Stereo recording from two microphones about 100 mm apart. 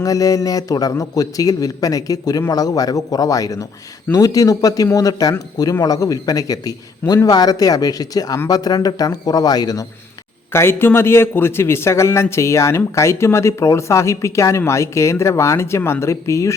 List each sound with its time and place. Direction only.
0.0 s a man's voice: 35° left (ahead or behind)
10.5 s a man's voice: 25° left (ahead or behind)